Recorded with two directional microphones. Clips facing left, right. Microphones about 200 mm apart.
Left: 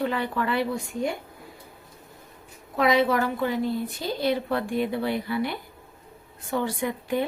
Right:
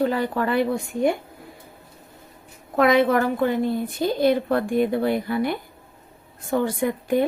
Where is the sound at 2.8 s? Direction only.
55° right (ahead or behind).